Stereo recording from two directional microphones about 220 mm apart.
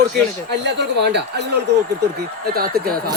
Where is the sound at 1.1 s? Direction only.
50° right (ahead or behind).